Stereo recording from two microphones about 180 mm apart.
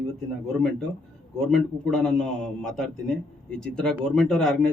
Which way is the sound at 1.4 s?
5° left (ahead or behind).